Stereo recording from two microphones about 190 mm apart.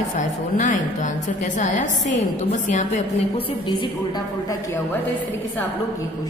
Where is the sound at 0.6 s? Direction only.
40° left (ahead or behind).